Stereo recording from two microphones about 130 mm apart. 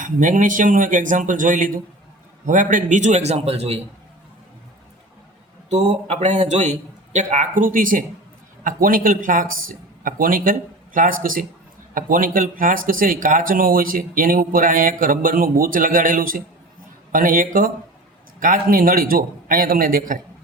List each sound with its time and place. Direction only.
0.0 s a man's voice: 80° right; by 3.8 s 50° right (ahead or behind)
5.6 s a man's voice: 60° right (ahead or behind); by 20.1 s 90° right